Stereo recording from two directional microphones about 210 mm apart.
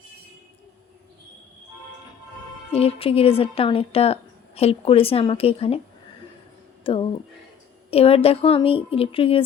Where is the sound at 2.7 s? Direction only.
25° left (ahead or behind).